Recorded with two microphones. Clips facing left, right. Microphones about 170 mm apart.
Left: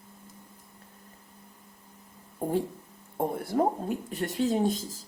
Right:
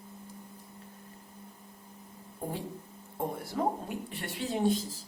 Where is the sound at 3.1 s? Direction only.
50° left (ahead or behind).